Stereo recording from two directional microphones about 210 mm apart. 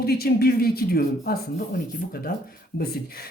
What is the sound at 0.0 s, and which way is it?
Speech, 50° left (ahead or behind).